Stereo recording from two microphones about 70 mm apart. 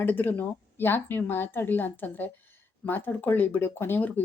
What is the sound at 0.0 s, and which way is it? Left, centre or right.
Speech, left.